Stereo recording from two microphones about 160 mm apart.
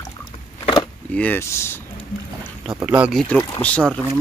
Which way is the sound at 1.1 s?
10° left (ahead or behind).